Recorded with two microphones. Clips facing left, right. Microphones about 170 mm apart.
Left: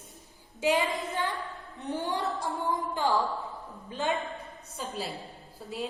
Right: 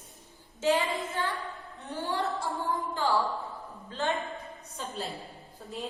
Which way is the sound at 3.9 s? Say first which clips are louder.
Left 1 dB; 15° left (ahead or behind).